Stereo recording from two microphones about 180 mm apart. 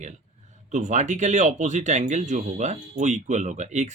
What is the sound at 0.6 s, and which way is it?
Speech, 40° right (ahead or behind).